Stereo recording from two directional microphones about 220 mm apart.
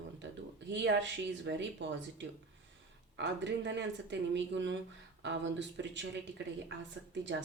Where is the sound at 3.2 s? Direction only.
55° right (ahead or behind).